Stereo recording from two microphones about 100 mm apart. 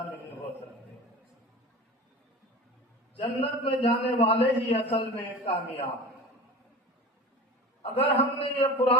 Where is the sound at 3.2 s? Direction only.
65° left (ahead or behind).